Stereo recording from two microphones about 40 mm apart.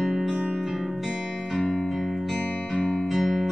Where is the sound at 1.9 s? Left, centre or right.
Centre.